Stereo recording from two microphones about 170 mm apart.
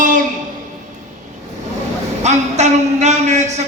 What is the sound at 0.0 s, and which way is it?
Music, 50° right (ahead or behind).